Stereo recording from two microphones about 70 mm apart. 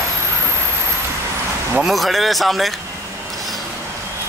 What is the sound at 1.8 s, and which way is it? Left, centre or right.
Speech, centre.